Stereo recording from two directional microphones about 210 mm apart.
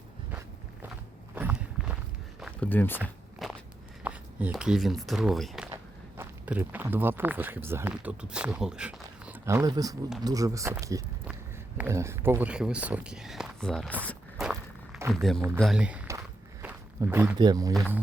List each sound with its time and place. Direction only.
1.4 s walk: 5° right (ahead or behind)
2.4 s a sound: 5° left (ahead or behind)
3.0 s walk: centre (ahead or behind)
4.0 s speech: 5° right (ahead or behind)
14.0 s walk: 5° left (ahead or behind)
15.1 s speech: centre (ahead or behind)
16.6 s a sound: 10° right (ahead or behind)
17.3 s speech: 20° right (ahead or behind)